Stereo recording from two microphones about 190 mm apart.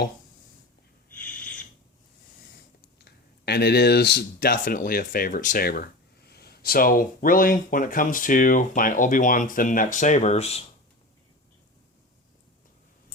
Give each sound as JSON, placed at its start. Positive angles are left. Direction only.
{"t": 1.1, "sound": "owl", "side_deg": 10}
{"t": 3.0, "sound": "speech", "side_deg": 60}